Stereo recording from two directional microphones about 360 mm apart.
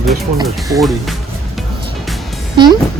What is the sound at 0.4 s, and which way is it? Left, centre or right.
Speech, centre.